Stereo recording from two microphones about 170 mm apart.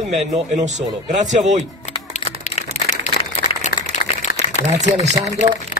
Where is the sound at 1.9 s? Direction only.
40° left (ahead or behind).